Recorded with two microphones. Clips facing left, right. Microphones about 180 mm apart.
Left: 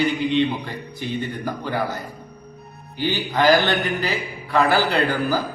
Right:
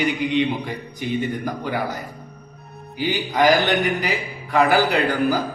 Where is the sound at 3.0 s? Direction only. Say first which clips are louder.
Right 1 dB; 15° right (ahead or behind).